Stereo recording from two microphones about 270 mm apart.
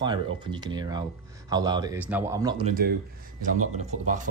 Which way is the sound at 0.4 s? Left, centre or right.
Centre.